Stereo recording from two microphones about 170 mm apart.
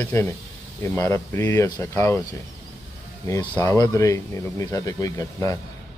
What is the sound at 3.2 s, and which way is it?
Speech, 20° left (ahead or behind).